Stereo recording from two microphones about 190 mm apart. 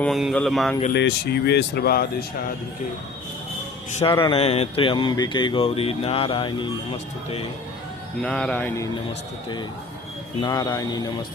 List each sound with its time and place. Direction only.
0.0 s speech: centre (ahead or behind)
0.9 s speech: 60° left (ahead or behind)
3.9 s speech: 25° left (ahead or behind)
8.2 s speech: 5° left (ahead or behind)
10.4 s speech: 20° left (ahead or behind)